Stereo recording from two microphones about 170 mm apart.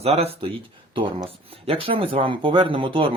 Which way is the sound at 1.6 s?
35° right (ahead or behind).